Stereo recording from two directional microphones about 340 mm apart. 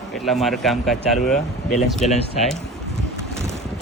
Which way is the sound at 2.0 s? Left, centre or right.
Centre.